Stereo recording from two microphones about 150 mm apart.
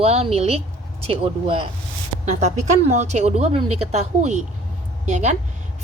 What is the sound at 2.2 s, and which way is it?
A woman's voice, 50° right (ahead or behind).